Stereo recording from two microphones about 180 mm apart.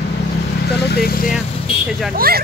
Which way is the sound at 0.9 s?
60° left (ahead or behind).